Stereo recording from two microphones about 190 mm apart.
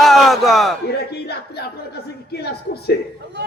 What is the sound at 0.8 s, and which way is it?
A man's voice, 60° left (ahead or behind).